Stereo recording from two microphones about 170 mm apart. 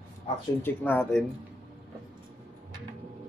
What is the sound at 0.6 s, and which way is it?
Speech, 10° left (ahead or behind).